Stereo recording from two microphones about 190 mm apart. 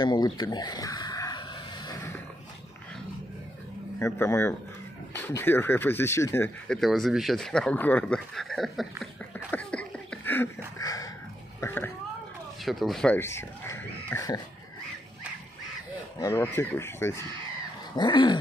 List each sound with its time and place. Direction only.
0.0 s a sound: 25° left (ahead or behind)
4.0 s speech: 15° left (ahead or behind)
6.8 s speech: centre (ahead or behind)
10.8 s dog: 20° left (ahead or behind)
11.6 s speech: 10° left (ahead or behind)
12.6 s speech: centre (ahead or behind); by 14.4 s 15° left (ahead or behind)
16.2 s speech: 15° left (ahead or behind)
17.9 s dog: 25° left (ahead or behind)